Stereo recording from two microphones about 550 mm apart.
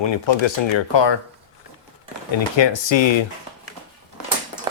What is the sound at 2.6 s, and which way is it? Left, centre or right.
Speech, left.